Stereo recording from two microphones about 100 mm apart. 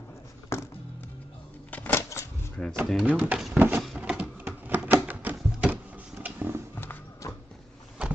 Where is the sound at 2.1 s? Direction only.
30° left (ahead or behind).